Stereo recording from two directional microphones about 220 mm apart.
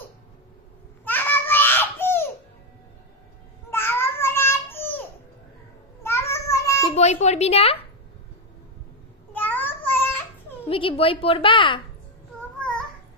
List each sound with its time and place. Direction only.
1.0 s a sound: 10° left (ahead or behind)
3.7 s a sound: 10° left (ahead or behind)
6.0 s child singing: 10° left (ahead or behind)
6.9 s a woman's voice: 30° left (ahead or behind)
9.3 s child singing: 10° left (ahead or behind)
10.7 s a woman's voice: 25° left (ahead or behind)
12.5 s babbling: 5° left (ahead or behind)